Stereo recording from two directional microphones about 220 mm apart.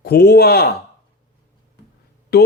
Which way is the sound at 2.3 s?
45° left (ahead or behind).